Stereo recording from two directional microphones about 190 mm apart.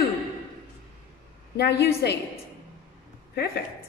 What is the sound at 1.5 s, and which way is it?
Speech, 60° left (ahead or behind).